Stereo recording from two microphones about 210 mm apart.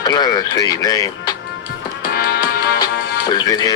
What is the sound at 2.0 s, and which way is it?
Music, 45° left (ahead or behind).